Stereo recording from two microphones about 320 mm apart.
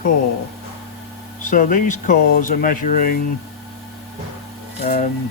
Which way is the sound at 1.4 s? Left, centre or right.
Left.